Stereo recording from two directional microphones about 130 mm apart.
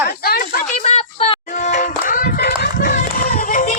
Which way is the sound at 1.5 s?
75° left (ahead or behind).